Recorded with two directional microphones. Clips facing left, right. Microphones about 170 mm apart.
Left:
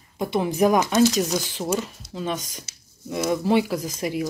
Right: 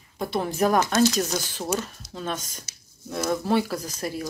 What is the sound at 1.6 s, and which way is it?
Speech, 5° right (ahead or behind).